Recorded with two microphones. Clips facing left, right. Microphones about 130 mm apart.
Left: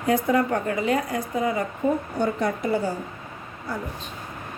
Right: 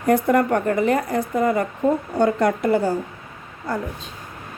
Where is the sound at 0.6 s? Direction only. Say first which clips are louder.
Right 4 dB; 50° right (ahead or behind).